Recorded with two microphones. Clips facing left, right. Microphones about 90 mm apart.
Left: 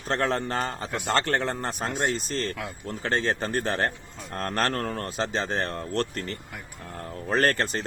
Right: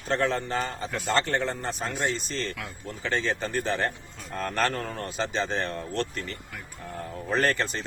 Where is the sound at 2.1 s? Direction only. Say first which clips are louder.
Left 3 dB; 45° left (ahead or behind).